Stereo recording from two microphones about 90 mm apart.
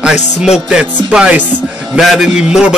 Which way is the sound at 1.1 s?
10° right (ahead or behind).